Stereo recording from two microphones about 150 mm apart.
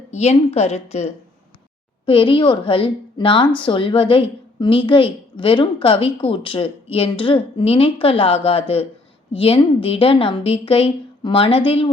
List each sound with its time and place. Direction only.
0.1 s a woman's voice: 45° left (ahead or behind)
2.0 s a woman's voice: 35° left (ahead or behind)